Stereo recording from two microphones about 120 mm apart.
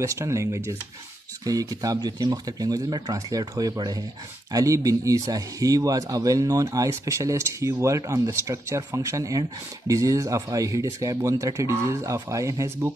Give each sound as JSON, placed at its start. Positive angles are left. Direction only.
{"t": 0.0, "sound": "speech", "side_deg": -25}